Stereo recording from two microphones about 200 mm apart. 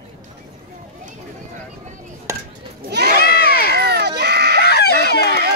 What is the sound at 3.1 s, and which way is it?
Crowd, 50° left (ahead or behind).